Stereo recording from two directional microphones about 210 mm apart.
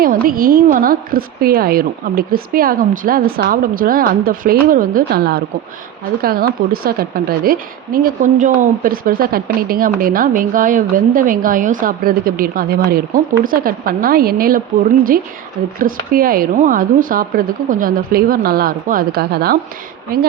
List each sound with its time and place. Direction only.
0.0 s a woman's voice: 40° right (ahead or behind)